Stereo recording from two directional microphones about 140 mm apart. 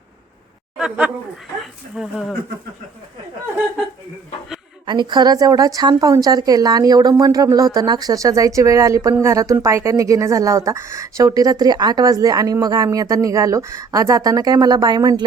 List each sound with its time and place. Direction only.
0.8 s speech: 5° right (ahead or behind)
4.9 s speech: 35° right (ahead or behind)